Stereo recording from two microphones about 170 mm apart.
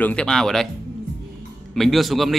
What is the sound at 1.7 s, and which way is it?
Speech, centre (ahead or behind).